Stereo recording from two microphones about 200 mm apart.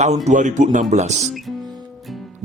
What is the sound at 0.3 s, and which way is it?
Speech, 35° right (ahead or behind).